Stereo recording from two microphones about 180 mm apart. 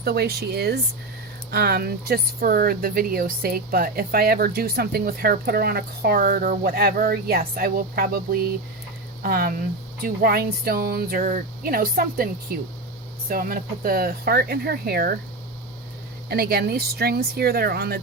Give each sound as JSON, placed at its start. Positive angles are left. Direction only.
{"t": 0.0, "sound": "speech", "side_deg": -60}
{"t": 16.3, "sound": "speech", "side_deg": -60}